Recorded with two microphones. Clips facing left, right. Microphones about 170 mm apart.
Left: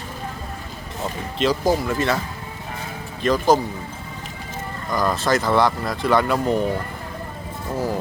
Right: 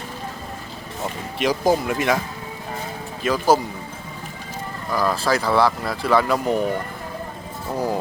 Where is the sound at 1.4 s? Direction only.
15° right (ahead or behind).